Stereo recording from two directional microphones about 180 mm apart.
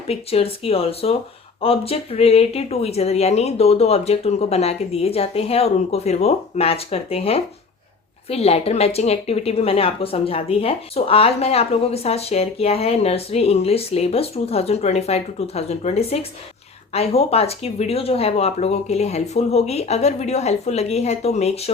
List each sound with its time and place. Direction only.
0.1 s a woman's voice: 35° left (ahead or behind)